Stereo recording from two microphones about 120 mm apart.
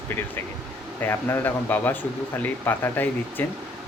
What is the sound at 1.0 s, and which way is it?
Speech, 15° left (ahead or behind).